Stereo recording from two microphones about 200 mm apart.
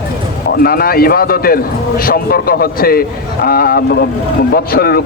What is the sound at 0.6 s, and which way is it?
A man's voice, 50° left (ahead or behind).